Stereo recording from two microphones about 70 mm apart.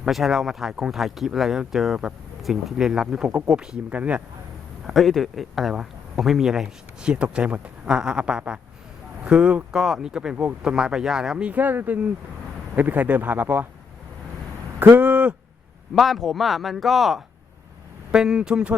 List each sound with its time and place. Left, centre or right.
0.0 s speech: centre
4.9 s speech: centre
11.4 s speech: right
14.9 s speech: right
16.0 s speech: centre